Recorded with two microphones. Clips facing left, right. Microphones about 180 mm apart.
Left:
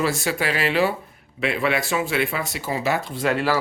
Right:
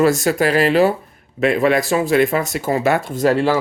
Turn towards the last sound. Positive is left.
turn(degrees=-40)  # may be behind; listen again after turning